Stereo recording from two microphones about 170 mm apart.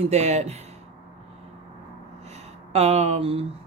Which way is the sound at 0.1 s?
40° right (ahead or behind).